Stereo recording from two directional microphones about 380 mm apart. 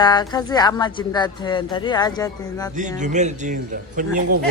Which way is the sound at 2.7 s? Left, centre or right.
Centre.